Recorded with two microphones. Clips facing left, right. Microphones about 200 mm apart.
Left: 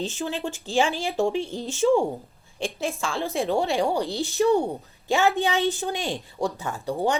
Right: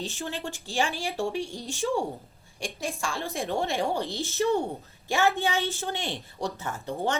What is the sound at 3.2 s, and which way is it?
A woman's voice, 15° left (ahead or behind).